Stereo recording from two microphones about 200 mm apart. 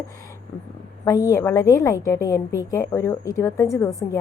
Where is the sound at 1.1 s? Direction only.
15° left (ahead or behind).